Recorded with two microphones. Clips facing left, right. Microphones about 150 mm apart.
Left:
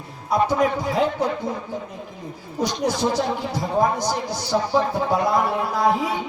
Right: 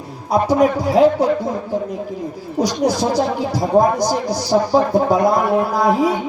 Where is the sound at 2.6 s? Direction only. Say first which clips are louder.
Right 5 dB; 40° right (ahead or behind).